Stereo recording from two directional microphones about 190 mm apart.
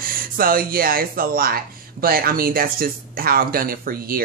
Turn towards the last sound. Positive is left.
turn(degrees=-50)  # may be behind; listen again after turning